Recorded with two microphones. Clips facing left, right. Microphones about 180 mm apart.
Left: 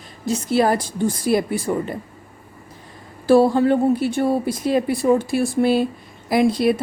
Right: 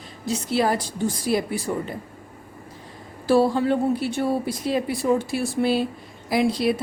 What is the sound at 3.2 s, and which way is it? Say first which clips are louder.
A woman's voice: left 5 dB; 50° left (ahead or behind).